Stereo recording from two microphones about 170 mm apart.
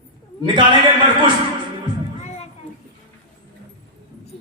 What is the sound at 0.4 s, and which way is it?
Speech, 30° right (ahead or behind).